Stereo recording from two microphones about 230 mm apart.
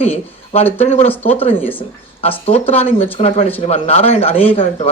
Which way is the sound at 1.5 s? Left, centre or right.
Centre.